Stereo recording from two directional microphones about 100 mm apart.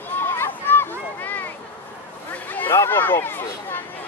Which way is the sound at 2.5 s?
25° left (ahead or behind).